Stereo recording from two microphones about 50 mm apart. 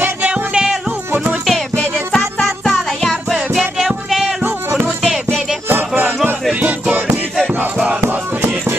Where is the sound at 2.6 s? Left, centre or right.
Centre.